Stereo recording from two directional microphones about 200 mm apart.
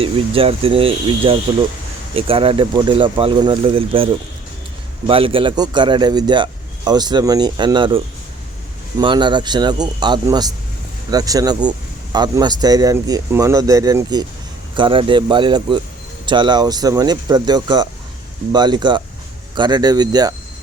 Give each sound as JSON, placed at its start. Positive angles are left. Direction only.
{"t": 0.0, "sound": "a man's voice", "side_deg": -30}